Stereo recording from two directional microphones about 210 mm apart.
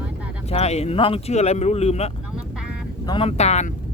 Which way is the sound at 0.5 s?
30° left (ahead or behind).